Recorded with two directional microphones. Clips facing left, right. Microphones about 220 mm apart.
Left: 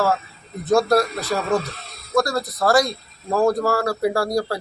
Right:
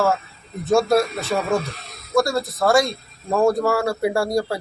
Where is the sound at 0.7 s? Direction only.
Centre (ahead or behind).